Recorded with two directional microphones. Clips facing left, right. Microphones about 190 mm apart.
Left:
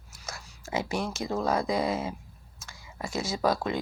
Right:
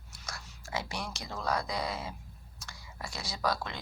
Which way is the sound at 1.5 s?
25° left (ahead or behind).